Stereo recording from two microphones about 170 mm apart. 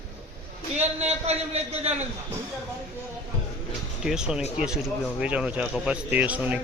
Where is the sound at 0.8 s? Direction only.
40° right (ahead or behind).